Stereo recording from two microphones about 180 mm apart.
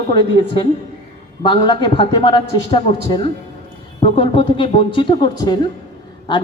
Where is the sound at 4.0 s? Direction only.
30° left (ahead or behind).